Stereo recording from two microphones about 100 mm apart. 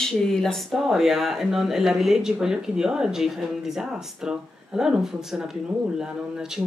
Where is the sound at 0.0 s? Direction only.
5° left (ahead or behind).